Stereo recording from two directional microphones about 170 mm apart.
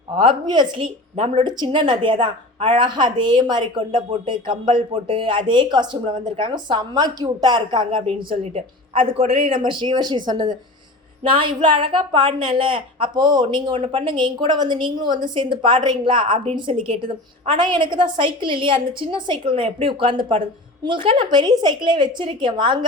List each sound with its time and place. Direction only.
0.2 s a woman's voice: 30° right (ahead or behind)